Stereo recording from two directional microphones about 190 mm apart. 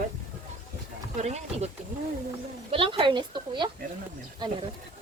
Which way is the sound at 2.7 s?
30° right (ahead or behind).